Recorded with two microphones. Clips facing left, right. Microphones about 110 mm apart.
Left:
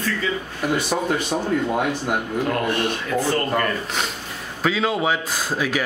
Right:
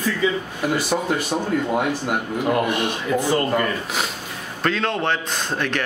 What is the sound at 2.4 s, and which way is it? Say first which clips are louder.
Speech: right 5 dB; 15° right (ahead or behind).